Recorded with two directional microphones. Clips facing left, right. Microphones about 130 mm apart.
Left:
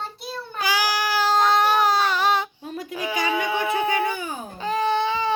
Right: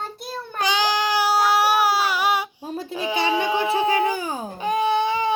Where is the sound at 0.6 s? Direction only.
20° right (ahead or behind).